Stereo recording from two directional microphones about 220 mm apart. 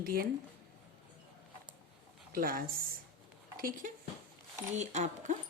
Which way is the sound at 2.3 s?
40° right (ahead or behind).